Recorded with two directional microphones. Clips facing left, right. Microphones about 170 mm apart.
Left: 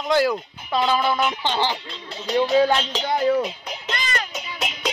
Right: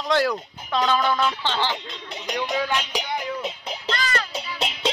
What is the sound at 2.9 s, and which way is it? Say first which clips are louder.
Speech: left 2 dB; 10° right (ahead or behind).